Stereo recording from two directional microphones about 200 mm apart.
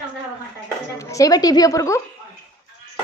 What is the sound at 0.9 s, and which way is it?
Speech, 15° left (ahead or behind).